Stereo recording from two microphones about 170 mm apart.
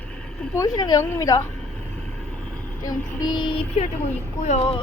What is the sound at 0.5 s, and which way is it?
Speech, 20° left (ahead or behind).